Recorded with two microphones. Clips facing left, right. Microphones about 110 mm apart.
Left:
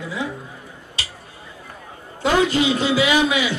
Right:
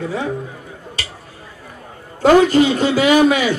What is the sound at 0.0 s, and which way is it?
Speech, 45° right (ahead or behind).